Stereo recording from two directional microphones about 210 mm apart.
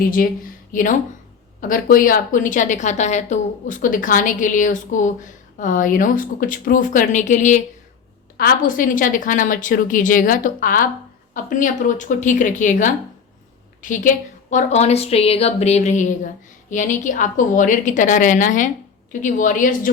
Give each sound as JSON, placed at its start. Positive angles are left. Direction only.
{"t": 0.0, "sound": "a woman's voice", "side_deg": 45}